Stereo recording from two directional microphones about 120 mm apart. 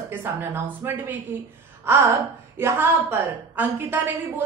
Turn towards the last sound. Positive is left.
turn(degrees=-15)  # may be behind; listen again after turning